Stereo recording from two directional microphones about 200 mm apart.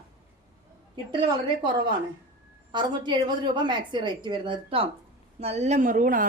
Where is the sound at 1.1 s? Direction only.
25° right (ahead or behind).